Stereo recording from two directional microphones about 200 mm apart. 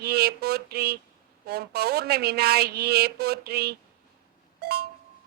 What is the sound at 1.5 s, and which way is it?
Speech, 50° right (ahead or behind).